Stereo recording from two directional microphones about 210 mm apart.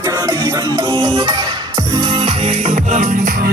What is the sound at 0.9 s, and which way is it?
Music, 15° right (ahead or behind).